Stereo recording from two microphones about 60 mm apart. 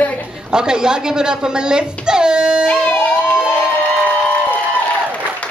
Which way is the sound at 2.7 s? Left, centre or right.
Left.